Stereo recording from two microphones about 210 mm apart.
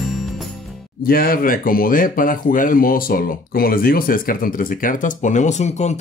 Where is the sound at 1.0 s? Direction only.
45° left (ahead or behind).